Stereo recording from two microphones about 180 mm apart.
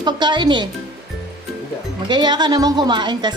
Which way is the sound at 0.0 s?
25° right (ahead or behind).